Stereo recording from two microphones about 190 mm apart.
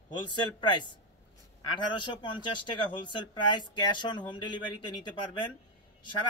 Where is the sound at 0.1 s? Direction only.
25° left (ahead or behind).